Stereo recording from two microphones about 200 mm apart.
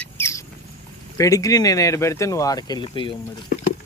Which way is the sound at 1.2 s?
15° left (ahead or behind).